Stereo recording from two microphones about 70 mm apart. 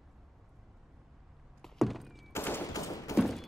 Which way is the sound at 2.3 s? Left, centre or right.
Left.